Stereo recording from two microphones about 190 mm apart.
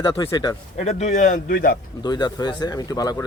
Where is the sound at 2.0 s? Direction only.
20° left (ahead or behind).